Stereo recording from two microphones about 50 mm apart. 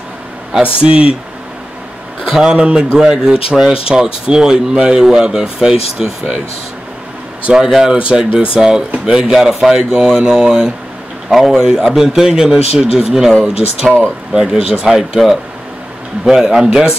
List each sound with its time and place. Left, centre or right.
0.6 s speech: right
2.2 s a man's voice: centre
7.5 s a man's voice: centre
9.8 s a man's voice: centre
10.4 s a man's voice: centre